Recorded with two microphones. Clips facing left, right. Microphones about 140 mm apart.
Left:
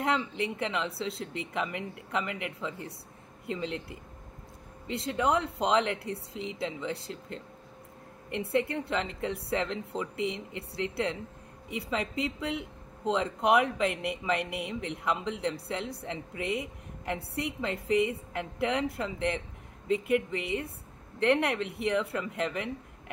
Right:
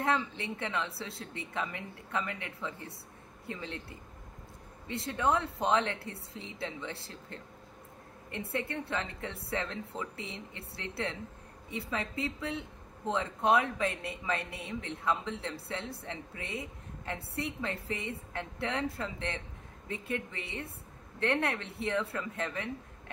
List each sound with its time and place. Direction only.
0.0 s a woman's voice: 20° left (ahead or behind)
4.8 s a woman's voice: 20° left (ahead or behind)